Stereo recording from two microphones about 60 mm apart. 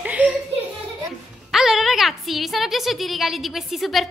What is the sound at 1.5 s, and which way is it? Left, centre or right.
A woman's voice, centre.